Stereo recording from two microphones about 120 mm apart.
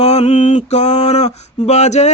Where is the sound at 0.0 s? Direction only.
60° left (ahead or behind).